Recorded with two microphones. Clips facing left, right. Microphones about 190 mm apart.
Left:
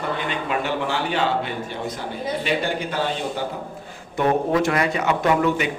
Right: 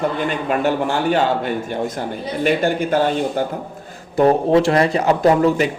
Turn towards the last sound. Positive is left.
turn(degrees=-35)  # may be behind; listen again after turning